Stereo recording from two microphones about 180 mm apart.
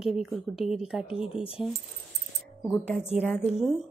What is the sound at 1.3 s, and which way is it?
Speech, 30° left (ahead or behind).